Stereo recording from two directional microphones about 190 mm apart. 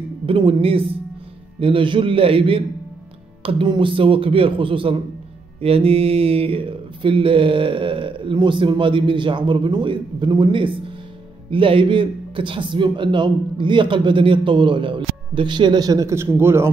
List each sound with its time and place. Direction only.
0.3 s mantra: 30° right (ahead or behind); by 16.7 s 15° right (ahead or behind)